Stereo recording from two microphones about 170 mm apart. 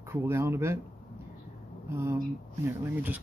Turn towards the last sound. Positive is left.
turn(degrees=-10)  # may be behind; listen again after turning